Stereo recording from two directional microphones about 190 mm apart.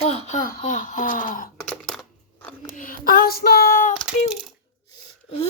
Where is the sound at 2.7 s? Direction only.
45° left (ahead or behind).